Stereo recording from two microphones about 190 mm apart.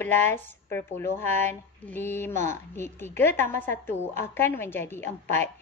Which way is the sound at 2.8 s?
10° left (ahead or behind).